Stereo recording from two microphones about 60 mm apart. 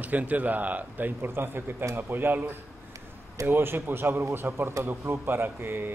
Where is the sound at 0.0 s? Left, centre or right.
Right.